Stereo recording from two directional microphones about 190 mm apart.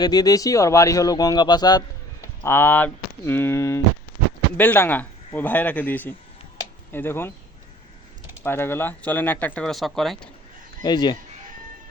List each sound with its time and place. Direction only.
0.0 s speech: 20° left (ahead or behind)
8.4 s speech: 10° left (ahead or behind)
10.8 s speech: 20° left (ahead or behind)